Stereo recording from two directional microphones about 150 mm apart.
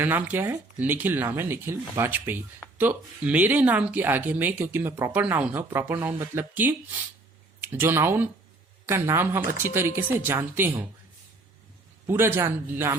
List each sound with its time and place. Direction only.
0.0 s speech: 10° right (ahead or behind)
12.0 s speech: 15° right (ahead or behind)